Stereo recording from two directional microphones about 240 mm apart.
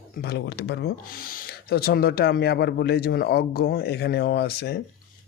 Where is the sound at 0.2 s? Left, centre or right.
Left.